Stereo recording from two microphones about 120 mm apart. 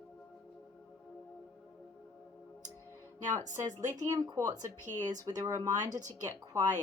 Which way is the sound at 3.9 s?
30° right (ahead or behind).